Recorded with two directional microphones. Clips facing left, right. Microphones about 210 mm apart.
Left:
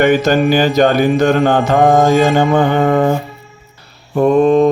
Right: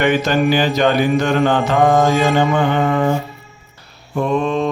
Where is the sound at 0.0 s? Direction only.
40° left (ahead or behind).